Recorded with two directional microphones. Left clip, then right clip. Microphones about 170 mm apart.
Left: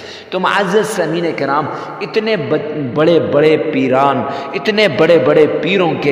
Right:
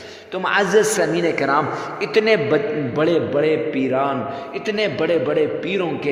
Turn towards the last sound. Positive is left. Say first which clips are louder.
# left 9 dB
turn(degrees=45)  # may be behind; listen again after turning